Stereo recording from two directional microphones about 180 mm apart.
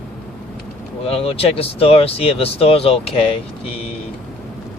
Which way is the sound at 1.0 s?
30° left (ahead or behind).